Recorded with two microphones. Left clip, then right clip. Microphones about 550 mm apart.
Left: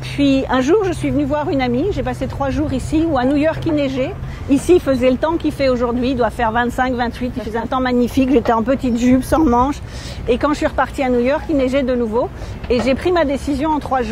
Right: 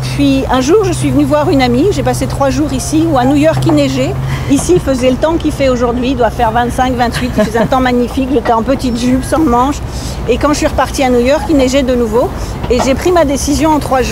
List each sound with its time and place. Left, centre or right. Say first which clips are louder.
0.2 s speech: right 4 dB; left